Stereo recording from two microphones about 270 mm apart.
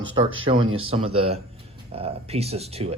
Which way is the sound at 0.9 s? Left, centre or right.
Right.